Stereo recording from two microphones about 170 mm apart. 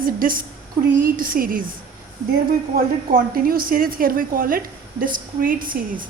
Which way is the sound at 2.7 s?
60° right (ahead or behind).